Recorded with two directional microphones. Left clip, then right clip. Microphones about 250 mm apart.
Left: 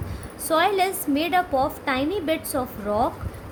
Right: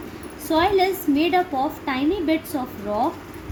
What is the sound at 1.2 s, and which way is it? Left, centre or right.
A woman's voice, left.